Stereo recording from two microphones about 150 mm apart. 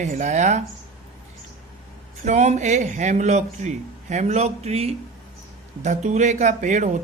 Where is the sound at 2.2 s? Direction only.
50° right (ahead or behind).